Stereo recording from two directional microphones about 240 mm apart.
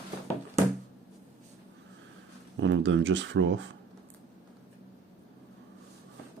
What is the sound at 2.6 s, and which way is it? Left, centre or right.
Speech, right.